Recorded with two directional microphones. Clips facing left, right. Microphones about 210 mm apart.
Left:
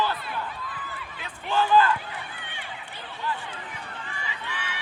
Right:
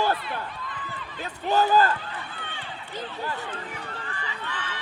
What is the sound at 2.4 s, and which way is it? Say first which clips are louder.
Run: right 2 dB; 15° left (ahead or behind).